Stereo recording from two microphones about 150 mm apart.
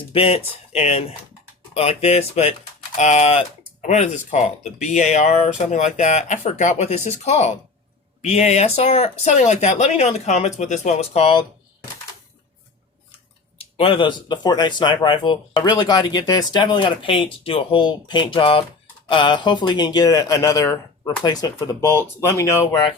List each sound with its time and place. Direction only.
0.1 s speech: 40° left (ahead or behind)
13.6 s speech: 35° left (ahead or behind); by 22.8 s 20° left (ahead or behind)